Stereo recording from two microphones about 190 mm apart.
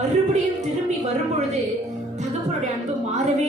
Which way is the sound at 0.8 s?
35° right (ahead or behind).